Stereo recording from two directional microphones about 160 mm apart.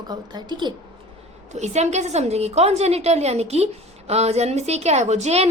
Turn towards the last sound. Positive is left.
turn(degrees=-40)  # may be behind; listen again after turning